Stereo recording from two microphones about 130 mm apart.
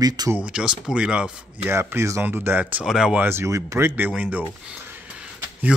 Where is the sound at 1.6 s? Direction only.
20° right (ahead or behind).